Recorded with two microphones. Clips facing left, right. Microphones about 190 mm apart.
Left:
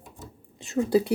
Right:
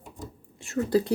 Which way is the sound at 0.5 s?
20° left (ahead or behind).